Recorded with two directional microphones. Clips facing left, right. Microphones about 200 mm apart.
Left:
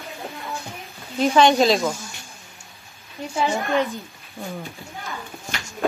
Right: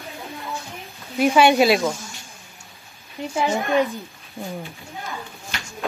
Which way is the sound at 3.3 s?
15° right (ahead or behind).